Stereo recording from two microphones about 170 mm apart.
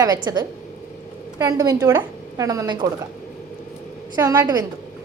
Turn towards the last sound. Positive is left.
turn(degrees=-20)  # may be behind; listen again after turning